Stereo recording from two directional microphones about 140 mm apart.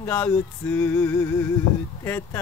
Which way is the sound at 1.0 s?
20° left (ahead or behind).